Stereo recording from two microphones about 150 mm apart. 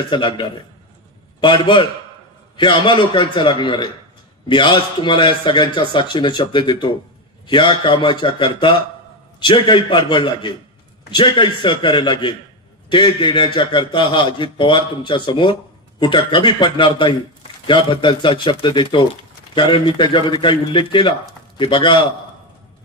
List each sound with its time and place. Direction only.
0.1 s speech: 35° left (ahead or behind)